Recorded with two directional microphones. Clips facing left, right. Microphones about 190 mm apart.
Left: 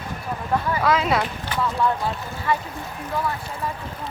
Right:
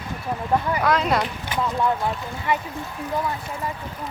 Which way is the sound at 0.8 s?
Centre (ahead or behind).